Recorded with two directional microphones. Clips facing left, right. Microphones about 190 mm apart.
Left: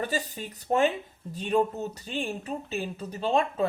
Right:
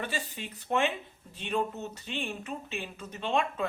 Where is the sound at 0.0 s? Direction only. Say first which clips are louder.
Left 5 dB; 40° left (ahead or behind).